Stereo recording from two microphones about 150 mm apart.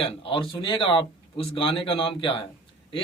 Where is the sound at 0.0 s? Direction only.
35° left (ahead or behind).